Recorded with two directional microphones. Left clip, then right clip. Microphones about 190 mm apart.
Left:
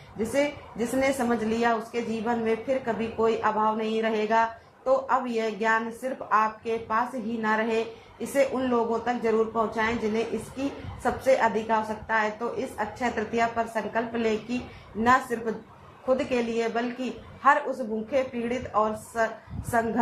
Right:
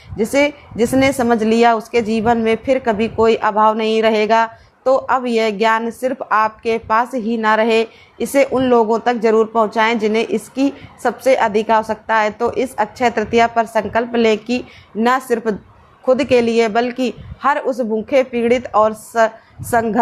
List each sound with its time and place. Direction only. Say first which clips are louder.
0.2 s a woman's voice: right 11 dB; 60° right (ahead or behind)